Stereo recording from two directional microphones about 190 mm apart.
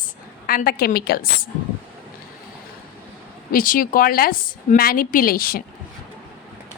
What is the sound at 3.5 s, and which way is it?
A woman's voice, 45° left (ahead or behind).